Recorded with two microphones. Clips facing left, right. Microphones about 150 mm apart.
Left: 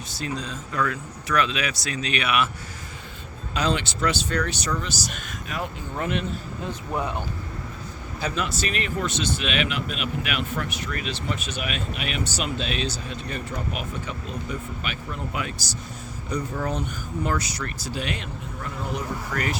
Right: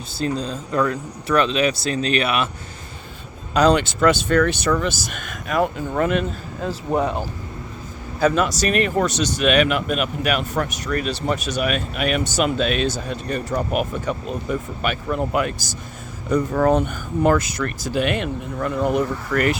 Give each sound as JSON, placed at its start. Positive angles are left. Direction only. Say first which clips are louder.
{"t": 0.1, "sound": "speech", "louder": "right 8 dB", "side_deg": -30}
{"t": 3.5, "sound": "speech", "louder": "right 9 dB", "side_deg": -40}
{"t": 7.0, "sound": "speech", "louder": "right 6 dB", "side_deg": -35}
{"t": 16.5, "sound": "speech", "louder": "right 14 dB", "side_deg": -85}
{"t": 16.7, "sound": "speech", "louder": "right 9 dB", "side_deg": -60}